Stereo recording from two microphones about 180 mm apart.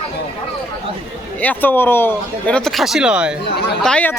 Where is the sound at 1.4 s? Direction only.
10° left (ahead or behind); by 3.3 s 5° right (ahead or behind).